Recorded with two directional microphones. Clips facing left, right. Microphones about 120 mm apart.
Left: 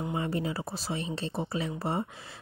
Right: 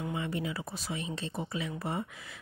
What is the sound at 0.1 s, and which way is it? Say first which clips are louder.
Speech: left 3 dB; 35° left (ahead or behind).